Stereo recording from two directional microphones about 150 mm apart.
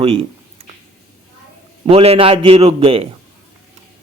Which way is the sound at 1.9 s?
40° right (ahead or behind).